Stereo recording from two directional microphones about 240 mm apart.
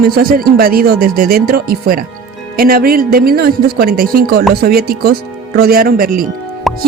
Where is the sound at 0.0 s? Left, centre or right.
Right.